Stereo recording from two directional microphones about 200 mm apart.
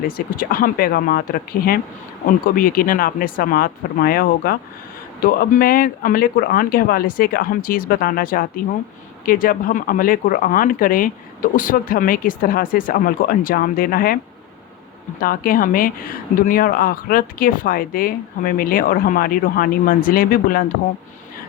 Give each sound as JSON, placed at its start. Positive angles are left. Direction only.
{"t": 0.3, "sound": "speech", "side_deg": 45}
{"t": 15.2, "sound": "speech", "side_deg": 45}